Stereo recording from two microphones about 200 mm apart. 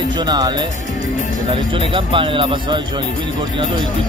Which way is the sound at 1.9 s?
25° right (ahead or behind).